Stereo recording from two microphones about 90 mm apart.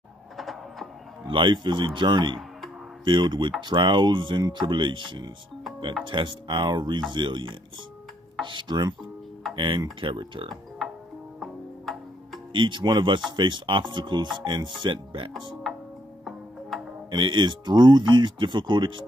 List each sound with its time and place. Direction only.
0.4 s a sound: centre (ahead or behind)
1.2 s speech: 60° right (ahead or behind)
9.9 s speech: 65° right (ahead or behind)
11.3 s music: centre (ahead or behind)
12.5 s speech: 60° right (ahead or behind)
16.7 s music: centre (ahead or behind)
17.1 s speech: 60° right (ahead or behind)